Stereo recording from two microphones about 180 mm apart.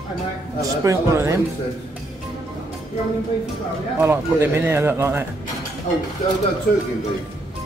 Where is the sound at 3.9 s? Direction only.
15° right (ahead or behind).